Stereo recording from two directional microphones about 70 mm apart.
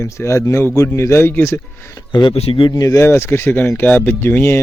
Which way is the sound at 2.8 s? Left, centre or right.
Left.